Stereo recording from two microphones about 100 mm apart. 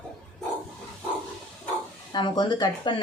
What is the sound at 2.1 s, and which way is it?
Speech, 50° left (ahead or behind).